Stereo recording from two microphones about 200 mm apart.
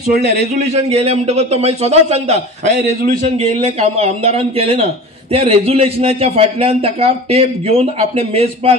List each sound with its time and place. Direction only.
0.6 s a man's voice: 30° right (ahead or behind)